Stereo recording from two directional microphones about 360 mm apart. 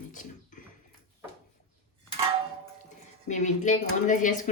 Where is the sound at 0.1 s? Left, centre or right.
Left.